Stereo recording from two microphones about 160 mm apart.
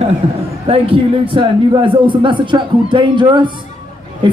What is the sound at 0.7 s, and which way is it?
A man's voice, 35° right (ahead or behind).